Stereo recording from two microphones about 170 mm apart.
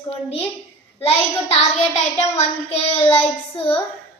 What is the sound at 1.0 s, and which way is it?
Child singing, 35° left (ahead or behind).